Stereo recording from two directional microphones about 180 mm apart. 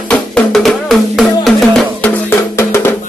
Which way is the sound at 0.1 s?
5° left (ahead or behind).